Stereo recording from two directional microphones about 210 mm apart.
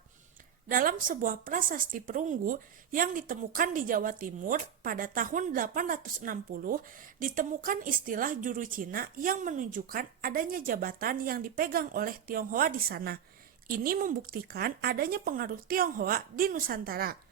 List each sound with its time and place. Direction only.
0.7 s a woman's voice: 40° right (ahead or behind)